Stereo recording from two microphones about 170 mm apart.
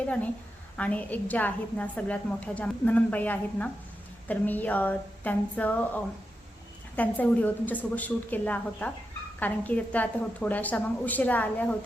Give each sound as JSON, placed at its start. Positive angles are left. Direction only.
{"t": 0.8, "sound": "a woman's voice", "side_deg": 10}